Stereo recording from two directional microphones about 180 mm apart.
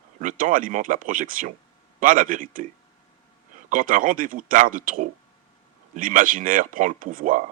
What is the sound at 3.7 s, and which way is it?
Speech, 45° right (ahead or behind).